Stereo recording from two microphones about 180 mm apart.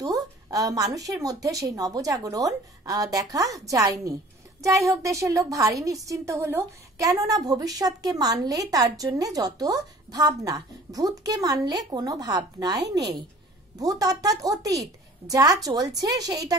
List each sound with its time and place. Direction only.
0.0 s a woman's voice: 20° right (ahead or behind)